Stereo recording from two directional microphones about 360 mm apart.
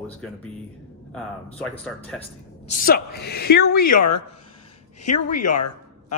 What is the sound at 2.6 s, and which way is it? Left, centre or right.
A woman's voice, left.